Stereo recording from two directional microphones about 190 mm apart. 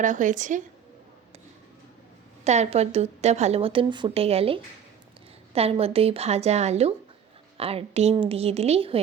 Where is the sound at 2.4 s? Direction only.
35° right (ahead or behind).